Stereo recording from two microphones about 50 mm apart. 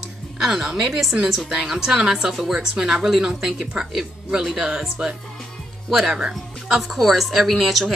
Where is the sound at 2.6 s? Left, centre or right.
Centre.